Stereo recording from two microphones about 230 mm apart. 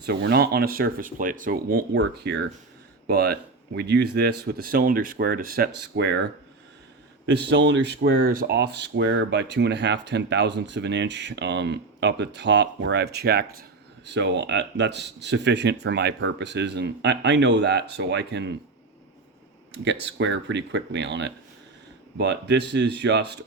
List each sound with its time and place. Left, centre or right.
0.0 s speech: right
2.0 s speech: right
7.3 s speech: right
19.8 s speech: right